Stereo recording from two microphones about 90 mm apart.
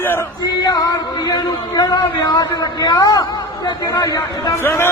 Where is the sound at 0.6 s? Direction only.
45° left (ahead or behind).